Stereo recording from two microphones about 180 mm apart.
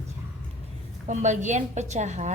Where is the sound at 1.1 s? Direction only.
40° right (ahead or behind).